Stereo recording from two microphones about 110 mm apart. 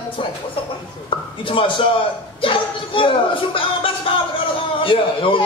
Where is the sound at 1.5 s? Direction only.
50° left (ahead or behind).